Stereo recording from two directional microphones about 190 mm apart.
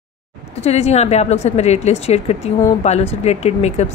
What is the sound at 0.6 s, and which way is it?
A woman's voice, 35° left (ahead or behind).